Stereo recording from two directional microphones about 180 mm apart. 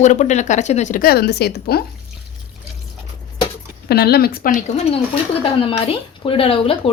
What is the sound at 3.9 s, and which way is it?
Speech, 60° left (ahead or behind).